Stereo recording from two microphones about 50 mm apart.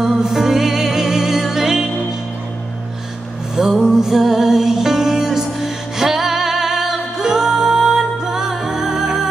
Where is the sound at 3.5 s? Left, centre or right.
Centre.